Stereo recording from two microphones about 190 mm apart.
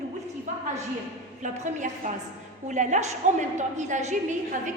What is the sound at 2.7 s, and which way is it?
A woman's voice, 40° right (ahead or behind).